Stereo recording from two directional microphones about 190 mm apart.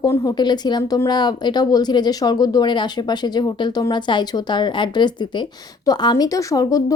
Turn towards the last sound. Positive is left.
turn(degrees=20)  # may be behind; listen again after turning